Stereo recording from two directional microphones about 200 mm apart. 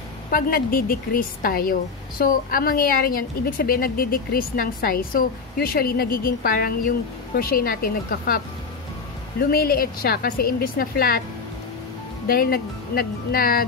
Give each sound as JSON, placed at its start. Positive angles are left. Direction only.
{"t": 0.3, "sound": "a woman's voice", "side_deg": 45}
{"t": 9.4, "sound": "a woman's voice", "side_deg": 50}
{"t": 12.3, "sound": "a woman's voice", "side_deg": 50}